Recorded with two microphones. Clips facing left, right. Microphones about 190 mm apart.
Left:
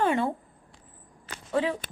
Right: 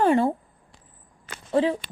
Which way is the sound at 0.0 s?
35° right (ahead or behind).